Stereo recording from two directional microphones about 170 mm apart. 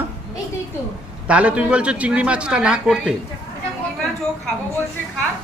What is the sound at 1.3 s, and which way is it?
Speech, 5° right (ahead or behind).